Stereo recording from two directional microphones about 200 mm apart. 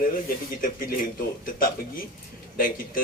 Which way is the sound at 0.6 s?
45° left (ahead or behind).